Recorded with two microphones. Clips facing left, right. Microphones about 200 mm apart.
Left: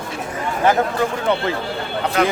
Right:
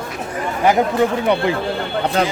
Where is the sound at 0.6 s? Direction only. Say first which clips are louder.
Right 3 dB; 15° right (ahead or behind).